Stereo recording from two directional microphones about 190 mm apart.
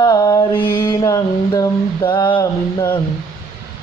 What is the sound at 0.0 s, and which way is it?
Mantra, 20° left (ahead or behind).